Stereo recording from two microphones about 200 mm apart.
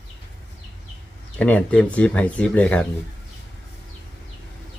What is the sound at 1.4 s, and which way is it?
Speech, 5° left (ahead or behind).